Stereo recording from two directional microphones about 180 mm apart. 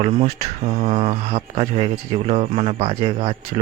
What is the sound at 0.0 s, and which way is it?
Speech, 35° right (ahead or behind).